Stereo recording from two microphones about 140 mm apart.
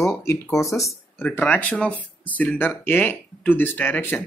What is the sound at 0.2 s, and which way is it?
Speech, 20° left (ahead or behind).